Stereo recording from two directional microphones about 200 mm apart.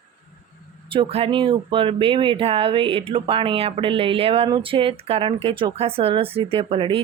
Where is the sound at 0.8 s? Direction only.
30° right (ahead or behind).